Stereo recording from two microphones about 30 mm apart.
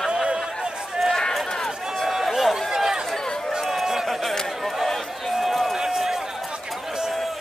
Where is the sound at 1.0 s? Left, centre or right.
Centre.